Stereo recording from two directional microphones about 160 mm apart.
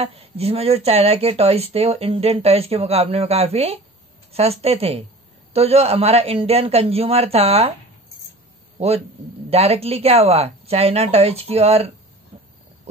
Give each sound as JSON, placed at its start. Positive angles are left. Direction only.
{"t": 0.0, "sound": "speech", "side_deg": -40}
{"t": 8.7, "sound": "a man's voice", "side_deg": -40}